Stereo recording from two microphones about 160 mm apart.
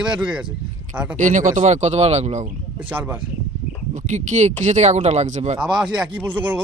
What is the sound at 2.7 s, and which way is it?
Speech, 10° right (ahead or behind).